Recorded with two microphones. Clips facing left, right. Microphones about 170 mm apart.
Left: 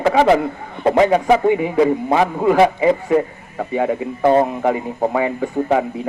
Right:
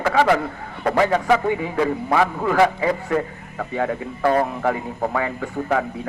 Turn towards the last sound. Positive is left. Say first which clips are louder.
# left 5 dB
turn(degrees=20)  # may be behind; listen again after turning